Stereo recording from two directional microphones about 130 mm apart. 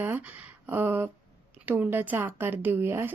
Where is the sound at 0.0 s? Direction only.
15° right (ahead or behind).